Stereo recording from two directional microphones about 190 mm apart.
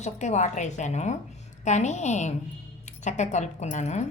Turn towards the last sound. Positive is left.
turn(degrees=35)  # may be behind; listen again after turning